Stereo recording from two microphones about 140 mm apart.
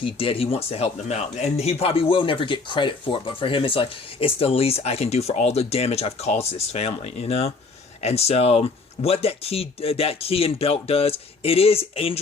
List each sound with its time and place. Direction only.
0.0 s speech: 40° left (ahead or behind)